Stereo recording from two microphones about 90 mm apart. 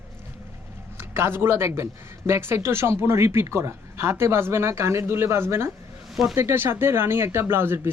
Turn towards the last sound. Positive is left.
turn(degrees=-25)  # may be behind; listen again after turning